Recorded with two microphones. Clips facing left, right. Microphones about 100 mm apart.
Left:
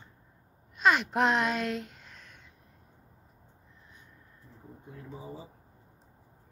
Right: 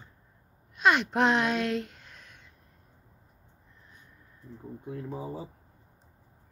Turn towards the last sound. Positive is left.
turn(degrees=-65)  # may be behind; listen again after turning